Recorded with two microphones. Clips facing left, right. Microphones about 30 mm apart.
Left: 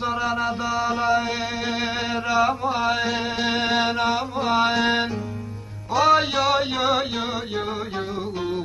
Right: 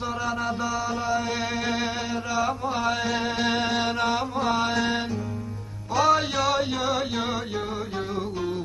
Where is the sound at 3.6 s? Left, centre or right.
Left.